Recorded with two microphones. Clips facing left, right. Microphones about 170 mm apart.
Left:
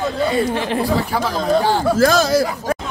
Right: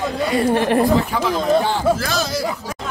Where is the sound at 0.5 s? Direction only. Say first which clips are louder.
Right 4 dB; 55° right (ahead or behind).